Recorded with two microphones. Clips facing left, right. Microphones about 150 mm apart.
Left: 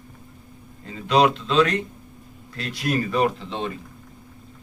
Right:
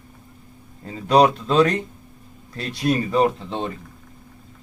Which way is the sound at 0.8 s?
40° right (ahead or behind).